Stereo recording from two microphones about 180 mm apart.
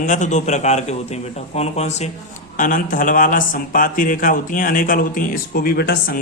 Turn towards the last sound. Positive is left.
turn(degrees=55)  # may be behind; listen again after turning